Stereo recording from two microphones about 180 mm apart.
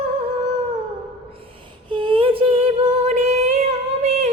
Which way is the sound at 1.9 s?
30° right (ahead or behind).